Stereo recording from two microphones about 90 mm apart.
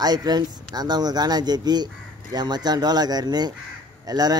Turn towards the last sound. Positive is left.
turn(degrees=-50)  # may be behind; listen again after turning